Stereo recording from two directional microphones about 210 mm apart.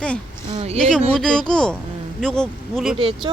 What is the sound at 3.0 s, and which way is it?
Speech, 25° right (ahead or behind).